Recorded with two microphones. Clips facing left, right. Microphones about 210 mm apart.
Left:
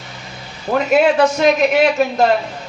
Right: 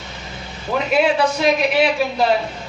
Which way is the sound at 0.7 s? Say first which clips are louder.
Left 4 dB; 45° left (ahead or behind).